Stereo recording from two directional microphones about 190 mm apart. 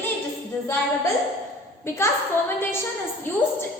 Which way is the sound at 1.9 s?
15° left (ahead or behind).